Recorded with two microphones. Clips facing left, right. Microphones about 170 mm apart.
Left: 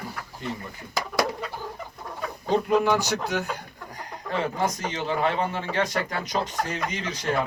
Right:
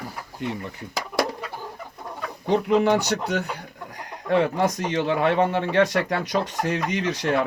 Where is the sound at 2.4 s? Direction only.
65° right (ahead or behind).